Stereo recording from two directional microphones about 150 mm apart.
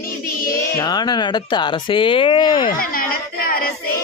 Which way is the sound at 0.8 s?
30° left (ahead or behind).